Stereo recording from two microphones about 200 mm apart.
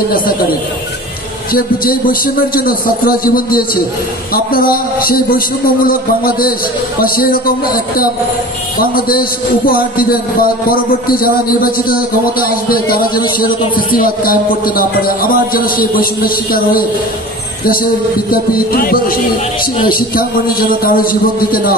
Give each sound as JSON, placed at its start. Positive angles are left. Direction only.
{"t": 1.5, "sound": "a man's voice", "side_deg": 45}
{"t": 18.3, "sound": "a man's voice", "side_deg": 45}